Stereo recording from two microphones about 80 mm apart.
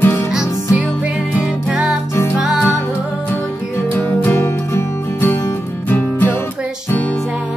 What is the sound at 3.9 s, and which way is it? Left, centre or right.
Music, left.